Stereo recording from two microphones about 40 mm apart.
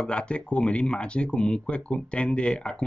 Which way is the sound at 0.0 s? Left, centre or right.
Left.